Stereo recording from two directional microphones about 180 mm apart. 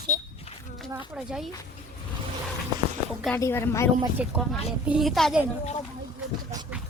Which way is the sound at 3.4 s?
15° left (ahead or behind).